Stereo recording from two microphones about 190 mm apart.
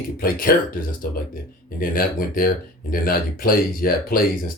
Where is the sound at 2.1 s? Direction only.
50° left (ahead or behind).